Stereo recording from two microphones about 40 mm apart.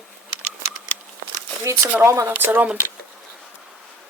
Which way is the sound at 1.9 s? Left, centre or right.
Right.